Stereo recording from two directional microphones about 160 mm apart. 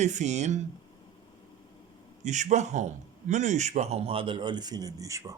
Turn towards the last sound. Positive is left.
turn(degrees=-20)  # may be behind; listen again after turning